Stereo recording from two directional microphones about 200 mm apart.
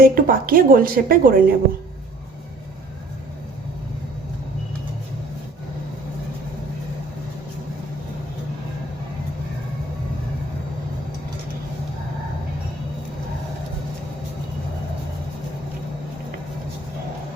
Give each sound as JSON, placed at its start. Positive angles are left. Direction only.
{"t": 0.0, "sound": "a woman's voice", "side_deg": -45}